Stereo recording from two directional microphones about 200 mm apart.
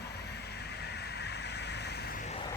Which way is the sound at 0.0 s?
55° left (ahead or behind).